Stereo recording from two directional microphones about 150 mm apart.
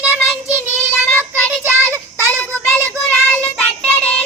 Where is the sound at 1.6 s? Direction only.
15° right (ahead or behind).